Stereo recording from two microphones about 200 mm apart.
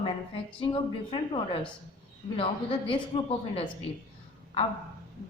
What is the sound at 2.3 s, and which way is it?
A woman's voice, 25° left (ahead or behind).